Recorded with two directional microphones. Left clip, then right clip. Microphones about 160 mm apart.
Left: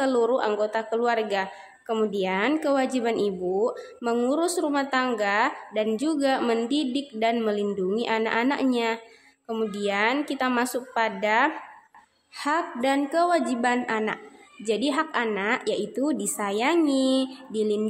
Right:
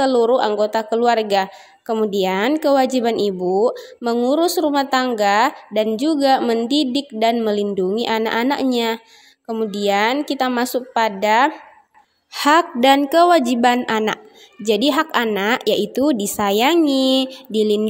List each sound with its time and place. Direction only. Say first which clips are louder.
0.0 s speech: right 7 dB; 25° right (ahead or behind)
12.4 s a woman's voice: right 11 dB; 50° right (ahead or behind)